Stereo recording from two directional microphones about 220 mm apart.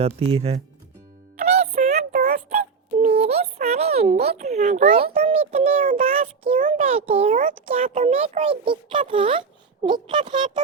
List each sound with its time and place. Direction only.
0.0 s speech: 25° right (ahead or behind)
1.5 s synthetic singing: 30° right (ahead or behind)
3.2 s a child's voice: 30° right (ahead or behind)